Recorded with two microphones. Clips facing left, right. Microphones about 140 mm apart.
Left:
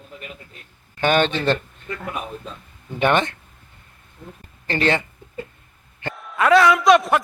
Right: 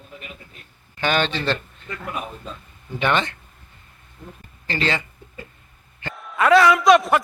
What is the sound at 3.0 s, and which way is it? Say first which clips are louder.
Speech: left 3 dB; 50° left (ahead or behind).